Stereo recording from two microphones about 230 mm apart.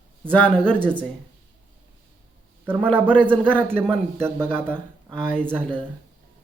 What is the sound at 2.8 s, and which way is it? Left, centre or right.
Speech, centre.